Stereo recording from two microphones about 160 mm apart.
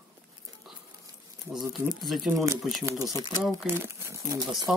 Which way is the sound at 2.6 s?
Centre (ahead or behind).